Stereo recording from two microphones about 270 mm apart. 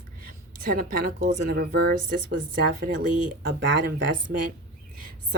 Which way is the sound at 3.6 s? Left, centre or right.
Right.